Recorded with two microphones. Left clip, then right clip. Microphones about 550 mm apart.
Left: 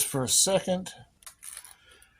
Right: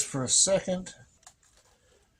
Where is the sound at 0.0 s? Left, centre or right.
Left.